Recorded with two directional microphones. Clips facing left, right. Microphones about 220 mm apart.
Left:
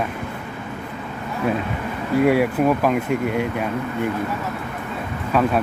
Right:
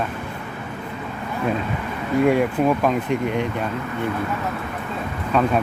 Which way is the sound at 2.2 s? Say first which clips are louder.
Left 1 dB; 5° left (ahead or behind).